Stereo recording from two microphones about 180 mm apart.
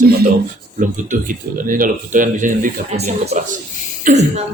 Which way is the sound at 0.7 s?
45° right (ahead or behind).